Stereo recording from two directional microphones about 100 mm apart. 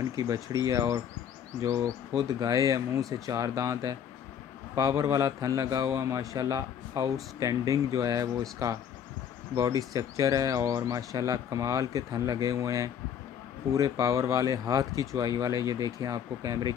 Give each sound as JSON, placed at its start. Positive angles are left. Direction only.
{"t": 0.1, "sound": "speech", "side_deg": -35}
{"t": 2.1, "sound": "speech", "side_deg": -35}